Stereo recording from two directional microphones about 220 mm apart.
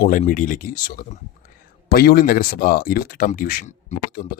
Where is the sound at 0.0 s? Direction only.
40° left (ahead or behind).